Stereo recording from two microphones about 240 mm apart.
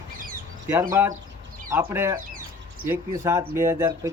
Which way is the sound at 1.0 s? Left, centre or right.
Centre.